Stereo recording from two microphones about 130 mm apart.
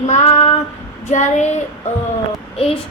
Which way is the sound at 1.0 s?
65° left (ahead or behind).